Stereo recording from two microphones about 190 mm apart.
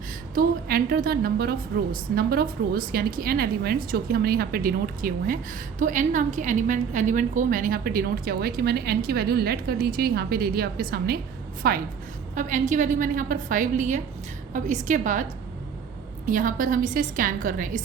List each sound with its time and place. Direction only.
0.3 s a woman's voice: 50° right (ahead or behind)
12.3 s a woman's voice: 40° right (ahead or behind)